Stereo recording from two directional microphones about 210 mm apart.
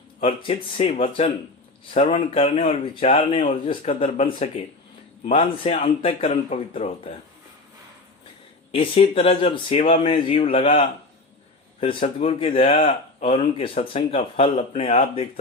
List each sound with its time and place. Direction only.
0.2 s speech: 25° left (ahead or behind)
8.7 s speech: 25° left (ahead or behind)